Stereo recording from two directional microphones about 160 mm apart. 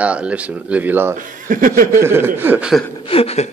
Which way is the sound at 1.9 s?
15° right (ahead or behind).